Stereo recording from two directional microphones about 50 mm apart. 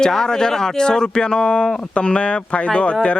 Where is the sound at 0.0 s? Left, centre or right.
Centre.